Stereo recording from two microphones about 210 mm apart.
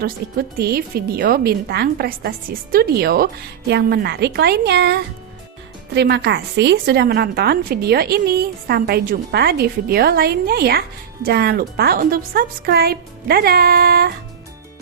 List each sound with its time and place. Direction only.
0.0 s a woman's voice: 50° right (ahead or behind)